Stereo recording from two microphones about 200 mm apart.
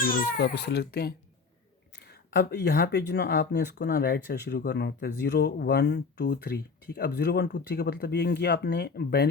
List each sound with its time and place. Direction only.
0.0 s a child's voice: 60° left (ahead or behind)